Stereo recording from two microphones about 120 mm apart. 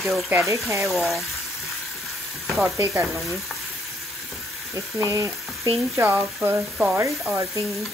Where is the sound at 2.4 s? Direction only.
Centre (ahead or behind).